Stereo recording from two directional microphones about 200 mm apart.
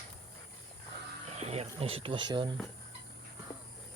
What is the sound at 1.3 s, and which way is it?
Speech, 30° right (ahead or behind).